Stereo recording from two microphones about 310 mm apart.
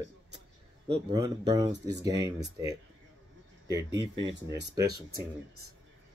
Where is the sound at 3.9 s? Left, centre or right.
Right.